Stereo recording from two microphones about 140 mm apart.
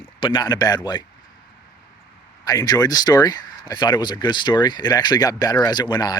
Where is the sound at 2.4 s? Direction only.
25° left (ahead or behind).